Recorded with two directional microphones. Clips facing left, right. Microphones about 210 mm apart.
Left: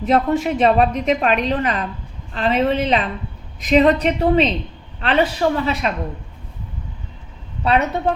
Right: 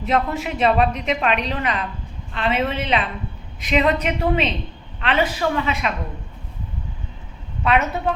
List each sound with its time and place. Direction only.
0.0 s a woman's voice: 40° left (ahead or behind)
7.6 s a woman's voice: 35° left (ahead or behind)